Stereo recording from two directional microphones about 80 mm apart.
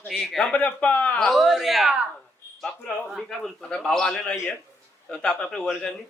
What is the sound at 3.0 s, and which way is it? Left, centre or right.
A man's voice, centre.